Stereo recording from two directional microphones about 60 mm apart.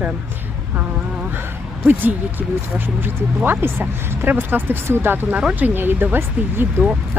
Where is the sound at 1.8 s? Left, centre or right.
Right.